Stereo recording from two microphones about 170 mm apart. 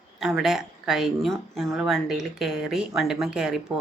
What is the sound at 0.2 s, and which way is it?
Speech, centre (ahead or behind).